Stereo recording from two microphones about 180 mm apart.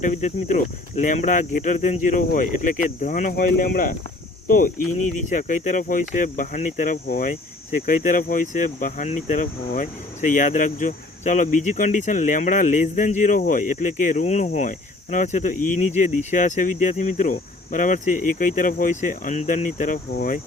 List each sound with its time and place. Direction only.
0.0 s speech: 40° left (ahead or behind)
5.2 s speech: 45° left (ahead or behind)